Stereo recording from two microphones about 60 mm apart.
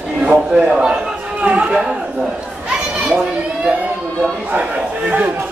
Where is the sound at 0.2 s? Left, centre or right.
Centre.